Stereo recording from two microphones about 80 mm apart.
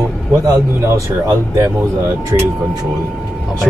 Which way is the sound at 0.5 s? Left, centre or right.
Right.